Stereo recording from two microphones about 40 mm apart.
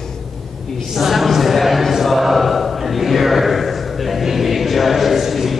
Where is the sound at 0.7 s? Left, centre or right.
Centre.